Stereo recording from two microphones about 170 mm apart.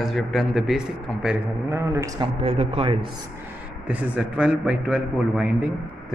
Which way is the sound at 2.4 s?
35° right (ahead or behind).